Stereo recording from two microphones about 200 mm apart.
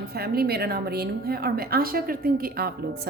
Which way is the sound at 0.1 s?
50° right (ahead or behind).